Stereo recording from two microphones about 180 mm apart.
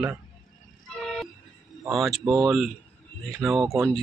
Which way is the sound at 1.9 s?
Centre (ahead or behind).